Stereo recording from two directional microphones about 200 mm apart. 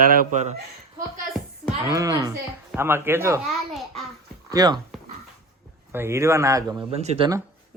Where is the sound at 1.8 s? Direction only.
15° right (ahead or behind).